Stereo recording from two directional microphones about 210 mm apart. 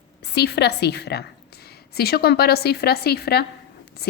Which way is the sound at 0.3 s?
50° left (ahead or behind).